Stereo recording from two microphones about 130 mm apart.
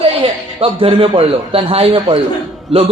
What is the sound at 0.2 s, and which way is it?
A man's voice, 45° right (ahead or behind).